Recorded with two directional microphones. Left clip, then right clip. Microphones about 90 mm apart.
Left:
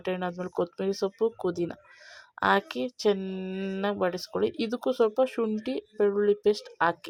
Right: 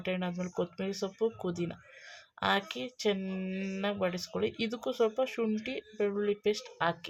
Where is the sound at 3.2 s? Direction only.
35° left (ahead or behind).